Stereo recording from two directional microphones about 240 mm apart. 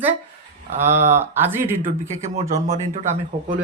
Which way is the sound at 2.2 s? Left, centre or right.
Right.